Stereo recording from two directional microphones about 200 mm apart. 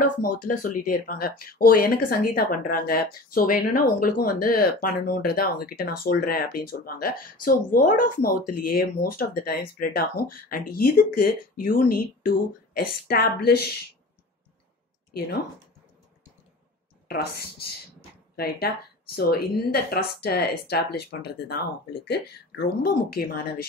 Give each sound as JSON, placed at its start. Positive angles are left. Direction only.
{"t": 0.0, "sound": "speech", "side_deg": 45}
{"t": 17.1, "sound": "speech", "side_deg": 50}